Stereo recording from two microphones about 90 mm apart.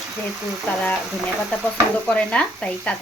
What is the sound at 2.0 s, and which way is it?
Speech, 10° left (ahead or behind).